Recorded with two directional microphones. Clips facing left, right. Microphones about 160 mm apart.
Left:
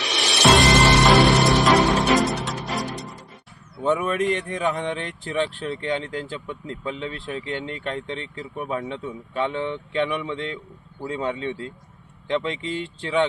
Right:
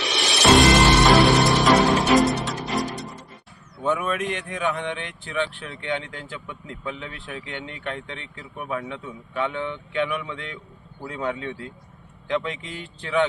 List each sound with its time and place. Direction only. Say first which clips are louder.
0.0 s music: left 1 dB; centre (ahead or behind)
3.9 s speech: left 4 dB; 35° left (ahead or behind)